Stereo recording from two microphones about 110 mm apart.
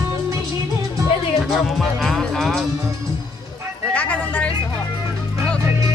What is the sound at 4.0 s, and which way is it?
Vehicle, 10° left (ahead or behind).